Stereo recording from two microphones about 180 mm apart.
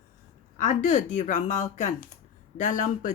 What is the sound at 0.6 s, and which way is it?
A woman's voice, 45° left (ahead or behind).